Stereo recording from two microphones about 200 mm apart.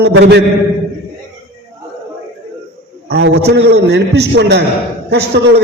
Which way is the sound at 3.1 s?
55° right (ahead or behind).